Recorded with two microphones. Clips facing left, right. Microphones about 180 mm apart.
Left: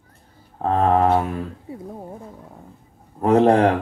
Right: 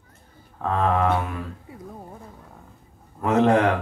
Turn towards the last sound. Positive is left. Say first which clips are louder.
# left 4 dB
turn(degrees=35)  # may be behind; listen again after turning